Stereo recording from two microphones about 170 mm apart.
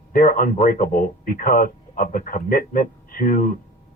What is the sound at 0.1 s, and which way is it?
A man's voice, 55° left (ahead or behind).